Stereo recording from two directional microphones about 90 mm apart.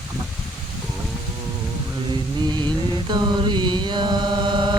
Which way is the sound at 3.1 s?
55° right (ahead or behind).